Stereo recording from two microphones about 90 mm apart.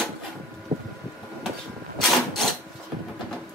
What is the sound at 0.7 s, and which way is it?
Boat, 40° right (ahead or behind).